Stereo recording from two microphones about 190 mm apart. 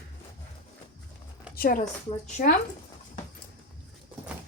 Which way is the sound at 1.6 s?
45° left (ahead or behind).